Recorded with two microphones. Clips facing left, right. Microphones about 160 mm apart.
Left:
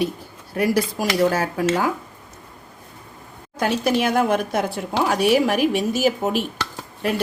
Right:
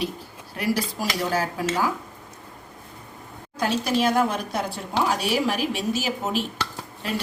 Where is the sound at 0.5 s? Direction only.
50° left (ahead or behind).